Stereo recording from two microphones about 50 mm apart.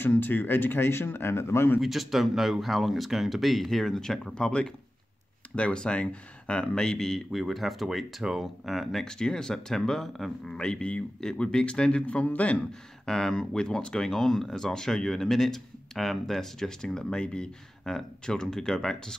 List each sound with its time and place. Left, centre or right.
0.0 s speech: left
1.8 s speech: centre
7.2 s speech: centre
9.0 s speech: centre
10.5 s speech: centre
13.0 s speech: centre